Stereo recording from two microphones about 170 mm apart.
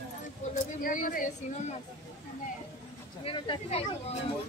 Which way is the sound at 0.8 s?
55° left (ahead or behind).